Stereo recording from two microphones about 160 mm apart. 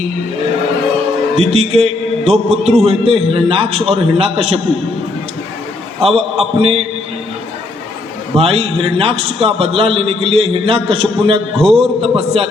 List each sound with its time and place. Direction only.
1.4 s a man's voice: 40° right (ahead or behind)
6.0 s a man's voice: 40° right (ahead or behind)
8.4 s a man's voice: 40° right (ahead or behind)